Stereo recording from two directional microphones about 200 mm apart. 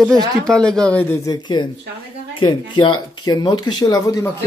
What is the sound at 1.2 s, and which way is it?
Speech, 20° left (ahead or behind).